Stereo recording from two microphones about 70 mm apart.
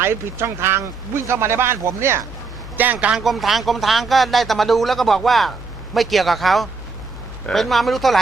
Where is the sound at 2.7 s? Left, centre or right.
Right.